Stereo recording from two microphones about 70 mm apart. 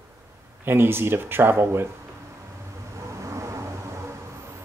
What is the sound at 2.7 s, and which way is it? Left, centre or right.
Vehicle, right.